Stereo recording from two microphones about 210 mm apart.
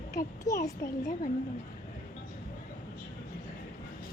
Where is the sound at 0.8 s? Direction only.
40° left (ahead or behind).